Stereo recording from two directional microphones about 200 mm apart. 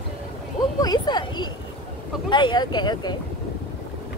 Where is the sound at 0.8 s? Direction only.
20° left (ahead or behind).